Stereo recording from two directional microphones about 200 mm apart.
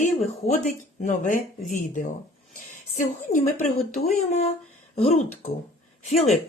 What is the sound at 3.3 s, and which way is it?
Speech, 35° left (ahead or behind).